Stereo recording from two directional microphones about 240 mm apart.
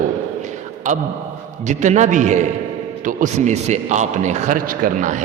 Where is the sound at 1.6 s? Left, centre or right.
Right.